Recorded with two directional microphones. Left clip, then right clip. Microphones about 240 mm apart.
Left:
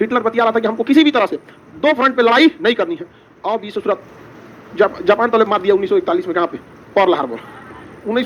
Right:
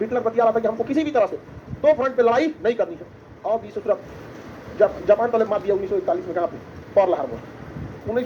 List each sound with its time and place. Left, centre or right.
0.0 s a man's voice: left